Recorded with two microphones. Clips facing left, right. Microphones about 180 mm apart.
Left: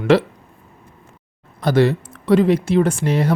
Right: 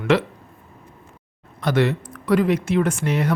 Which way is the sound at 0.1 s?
35° left (ahead or behind).